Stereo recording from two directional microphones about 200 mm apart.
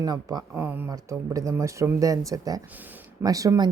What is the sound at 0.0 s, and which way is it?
Speech, 20° right (ahead or behind).